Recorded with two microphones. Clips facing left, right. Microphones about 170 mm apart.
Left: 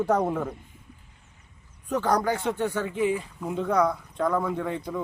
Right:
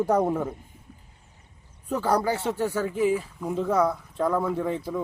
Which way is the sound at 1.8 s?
5° right (ahead or behind).